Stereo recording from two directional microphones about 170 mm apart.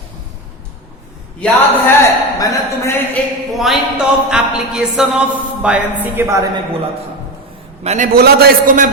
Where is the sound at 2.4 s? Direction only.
15° left (ahead or behind).